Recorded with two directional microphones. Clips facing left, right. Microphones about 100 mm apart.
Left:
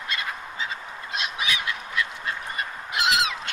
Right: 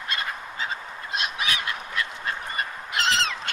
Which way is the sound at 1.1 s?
50° right (ahead or behind).